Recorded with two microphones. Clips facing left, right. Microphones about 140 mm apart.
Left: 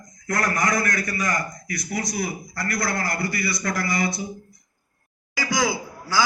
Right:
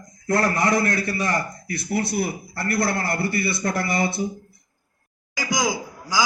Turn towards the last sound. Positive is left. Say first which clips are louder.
# even
turn(degrees=-15)  # may be behind; listen again after turning